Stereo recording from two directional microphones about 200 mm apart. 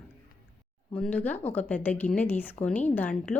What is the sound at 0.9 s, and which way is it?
Speech, 5° left (ahead or behind).